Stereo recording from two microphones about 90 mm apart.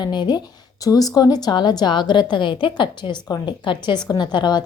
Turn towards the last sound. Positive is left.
turn(degrees=55)  # may be behind; listen again after turning